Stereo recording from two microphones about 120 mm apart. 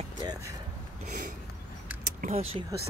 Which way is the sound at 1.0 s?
90° right.